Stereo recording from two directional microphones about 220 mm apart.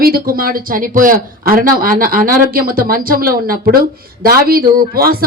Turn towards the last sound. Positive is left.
turn(degrees=-40)  # may be behind; listen again after turning